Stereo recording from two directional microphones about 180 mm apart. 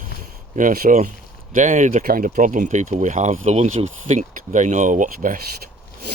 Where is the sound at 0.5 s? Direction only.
50° right (ahead or behind).